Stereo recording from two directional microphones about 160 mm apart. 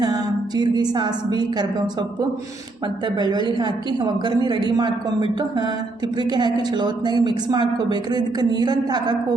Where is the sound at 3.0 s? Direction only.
25° right (ahead or behind).